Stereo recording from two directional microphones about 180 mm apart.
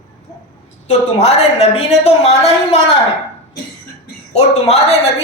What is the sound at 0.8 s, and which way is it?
A woman's voice, 35° left (ahead or behind).